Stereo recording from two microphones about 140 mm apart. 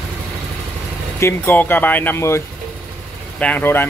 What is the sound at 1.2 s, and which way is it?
Speech, 15° left (ahead or behind).